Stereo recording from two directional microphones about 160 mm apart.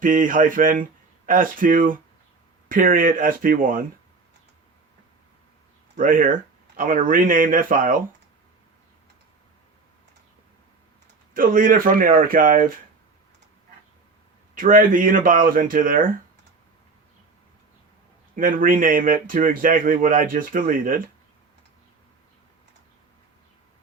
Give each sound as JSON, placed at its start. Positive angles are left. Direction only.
{"t": 0.0, "sound": "speech", "side_deg": -55}
{"t": 6.0, "sound": "speech", "side_deg": -60}
{"t": 11.3, "sound": "speech", "side_deg": -60}
{"t": 14.5, "sound": "speech", "side_deg": -60}
{"t": 18.3, "sound": "speech", "side_deg": -60}